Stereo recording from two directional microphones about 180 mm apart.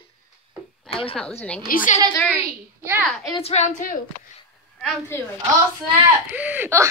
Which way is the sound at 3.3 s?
35° left (ahead or behind).